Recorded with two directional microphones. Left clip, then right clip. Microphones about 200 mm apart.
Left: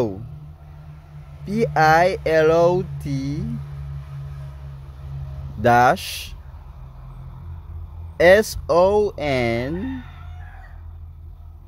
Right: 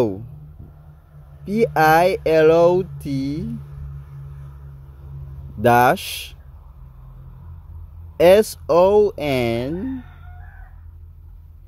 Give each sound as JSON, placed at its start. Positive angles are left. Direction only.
{"t": 1.4, "sound": "speech", "side_deg": -20}
{"t": 5.6, "sound": "speech", "side_deg": -20}
{"t": 8.2, "sound": "speech", "side_deg": -20}